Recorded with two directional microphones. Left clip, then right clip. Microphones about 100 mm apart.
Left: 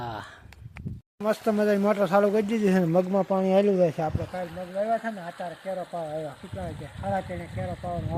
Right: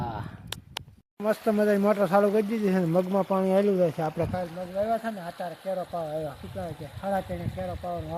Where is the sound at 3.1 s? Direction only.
Centre (ahead or behind).